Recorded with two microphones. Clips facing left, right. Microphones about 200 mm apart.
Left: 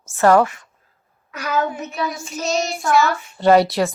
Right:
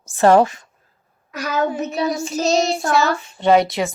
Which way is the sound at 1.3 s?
40° right (ahead or behind).